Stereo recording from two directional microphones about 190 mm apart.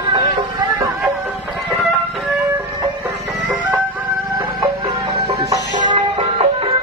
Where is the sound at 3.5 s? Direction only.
10° right (ahead or behind).